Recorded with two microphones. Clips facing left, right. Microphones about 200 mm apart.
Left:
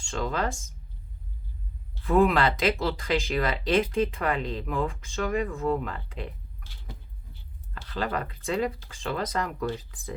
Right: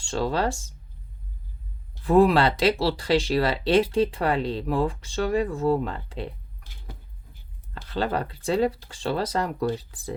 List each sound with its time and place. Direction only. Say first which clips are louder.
0.0 s speech: right 4 dB; 35° right (ahead or behind)
2.0 s speech: right 4 dB; 30° right (ahead or behind)
7.9 s speech: right 4 dB; 35° right (ahead or behind)